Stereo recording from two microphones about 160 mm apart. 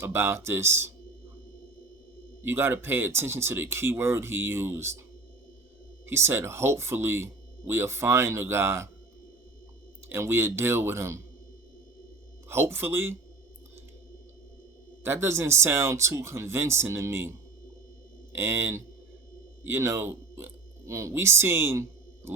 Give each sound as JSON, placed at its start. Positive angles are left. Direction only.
{"t": 0.0, "sound": "speech", "side_deg": -15}
{"t": 2.4, "sound": "speech", "side_deg": -15}
{"t": 6.1, "sound": "speech", "side_deg": -15}
{"t": 10.1, "sound": "speech", "side_deg": -15}
{"t": 12.5, "sound": "speech", "side_deg": -15}
{"t": 15.0, "sound": "speech", "side_deg": -15}
{"t": 18.3, "sound": "speech", "side_deg": -15}